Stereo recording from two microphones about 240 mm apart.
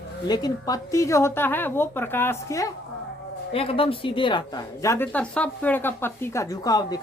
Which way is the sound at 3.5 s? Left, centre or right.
Left.